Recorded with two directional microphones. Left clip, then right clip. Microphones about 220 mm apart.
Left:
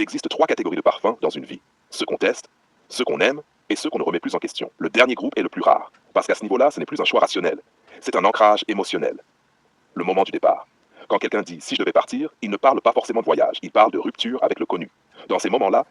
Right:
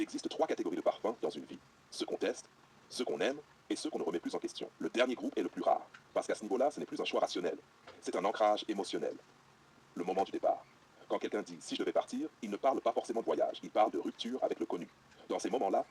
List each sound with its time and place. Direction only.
0.0 s speech: 35° left (ahead or behind)